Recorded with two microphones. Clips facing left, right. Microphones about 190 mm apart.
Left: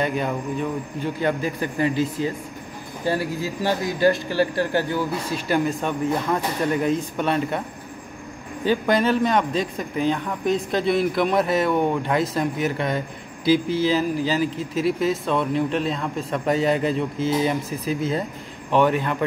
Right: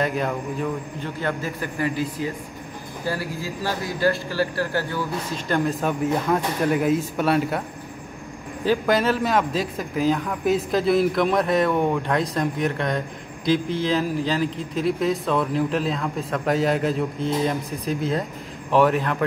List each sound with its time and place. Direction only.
0.0 s a man's voice: centre (ahead or behind)
1.0 s speech: 15° left (ahead or behind)
3.1 s speech: 20° left (ahead or behind)
5.5 s a man's voice: centre (ahead or behind)
8.6 s a man's voice: centre (ahead or behind)